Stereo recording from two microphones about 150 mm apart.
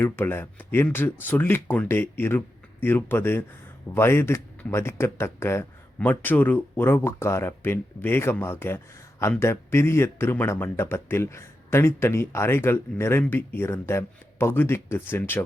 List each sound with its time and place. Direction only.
0.0 s speech: 15° left (ahead or behind)